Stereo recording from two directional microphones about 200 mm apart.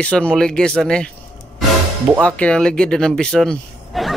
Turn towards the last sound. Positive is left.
turn(degrees=0)  # may be behind; listen again after turning